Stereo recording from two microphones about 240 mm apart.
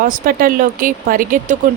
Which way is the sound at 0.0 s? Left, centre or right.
Right.